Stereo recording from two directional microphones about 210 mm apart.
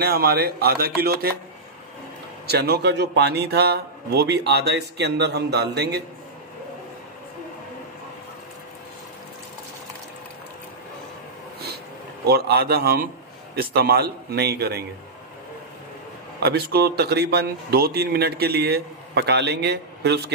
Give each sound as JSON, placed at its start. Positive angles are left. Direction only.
{"t": 0.0, "sound": "a man's voice", "side_deg": -50}
{"t": 2.4, "sound": "a man's voice", "side_deg": -50}
{"t": 12.3, "sound": "a man's voice", "side_deg": -50}
{"t": 16.3, "sound": "a man's voice", "side_deg": -50}